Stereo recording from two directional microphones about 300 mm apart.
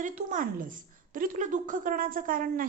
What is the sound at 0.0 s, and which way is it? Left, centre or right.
A woman's voice, right.